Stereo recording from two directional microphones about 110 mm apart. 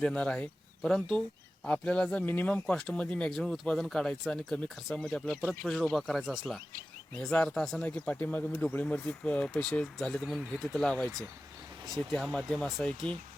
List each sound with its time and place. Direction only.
0.0 s speech: 10° left (ahead or behind)